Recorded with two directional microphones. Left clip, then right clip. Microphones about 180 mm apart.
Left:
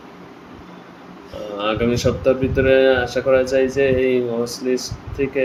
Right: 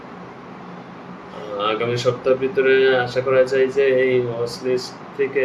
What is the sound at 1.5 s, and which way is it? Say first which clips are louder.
Speech: left 1 dB; 50° left (ahead or behind).